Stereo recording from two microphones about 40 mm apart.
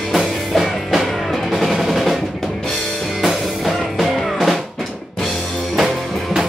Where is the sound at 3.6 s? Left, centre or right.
Centre.